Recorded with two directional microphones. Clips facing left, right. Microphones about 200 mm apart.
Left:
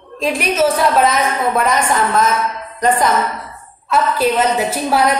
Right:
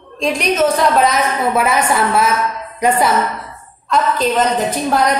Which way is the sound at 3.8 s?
5° left (ahead or behind).